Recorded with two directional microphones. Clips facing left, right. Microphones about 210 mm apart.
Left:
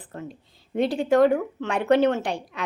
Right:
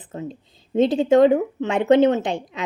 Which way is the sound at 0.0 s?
20° right (ahead or behind).